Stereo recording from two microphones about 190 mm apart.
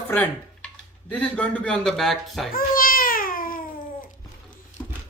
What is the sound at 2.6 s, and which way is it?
Babbling, 50° left (ahead or behind).